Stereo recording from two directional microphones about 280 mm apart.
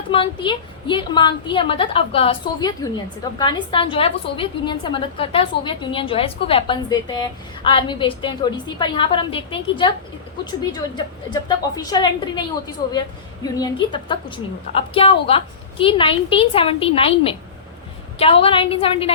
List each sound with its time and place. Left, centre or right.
0.1 s a woman's voice: centre